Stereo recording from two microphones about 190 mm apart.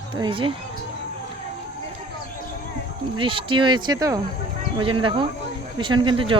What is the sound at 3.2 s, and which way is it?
Speech, 25° right (ahead or behind).